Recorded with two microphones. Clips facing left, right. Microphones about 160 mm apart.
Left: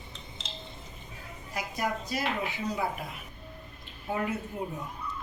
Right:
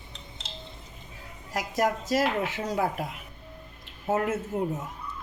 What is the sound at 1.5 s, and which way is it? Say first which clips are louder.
Speech: right 6 dB; 90° right.